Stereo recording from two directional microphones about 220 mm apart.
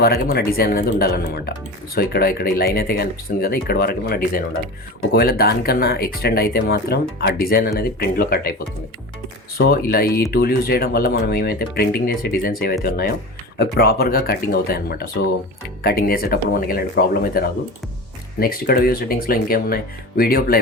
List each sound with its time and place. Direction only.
0.0 s speech: 45° left (ahead or behind)
9.6 s speech: 45° left (ahead or behind)